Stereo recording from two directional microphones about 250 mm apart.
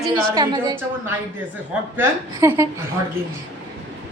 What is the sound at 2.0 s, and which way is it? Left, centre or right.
Speech, centre.